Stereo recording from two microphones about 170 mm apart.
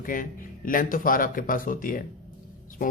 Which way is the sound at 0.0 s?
55° left (ahead or behind).